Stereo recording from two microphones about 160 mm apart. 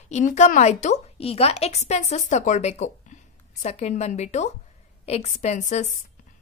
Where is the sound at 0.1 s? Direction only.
50° left (ahead or behind).